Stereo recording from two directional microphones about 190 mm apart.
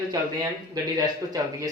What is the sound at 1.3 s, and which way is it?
Speech, 20° right (ahead or behind).